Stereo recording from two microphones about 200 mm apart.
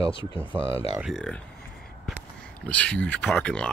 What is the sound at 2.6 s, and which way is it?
Speech, 5° left (ahead or behind).